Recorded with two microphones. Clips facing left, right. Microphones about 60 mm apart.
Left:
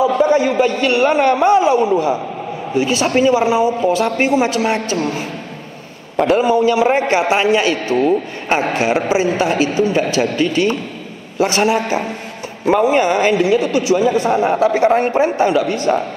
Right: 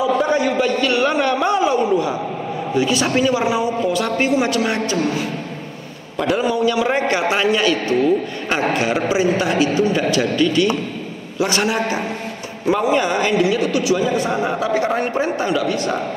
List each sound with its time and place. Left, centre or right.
0.0 s a man's voice: left
6.1 s a man's voice: left
6.4 s a man's voice: left
8.7 s a man's voice: left